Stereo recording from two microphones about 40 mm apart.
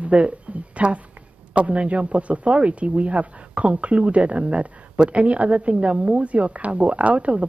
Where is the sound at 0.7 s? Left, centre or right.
Right.